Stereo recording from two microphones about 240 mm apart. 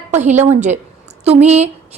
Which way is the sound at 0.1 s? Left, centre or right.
Right.